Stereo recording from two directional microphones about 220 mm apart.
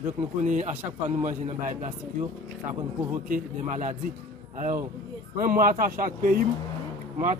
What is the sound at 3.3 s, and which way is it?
Speech, 35° right (ahead or behind).